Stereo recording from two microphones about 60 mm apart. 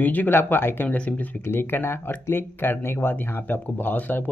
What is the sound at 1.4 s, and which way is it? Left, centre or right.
Speech, left.